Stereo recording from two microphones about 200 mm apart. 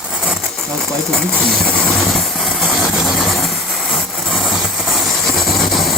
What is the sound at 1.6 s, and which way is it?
Vehicle, centre (ahead or behind).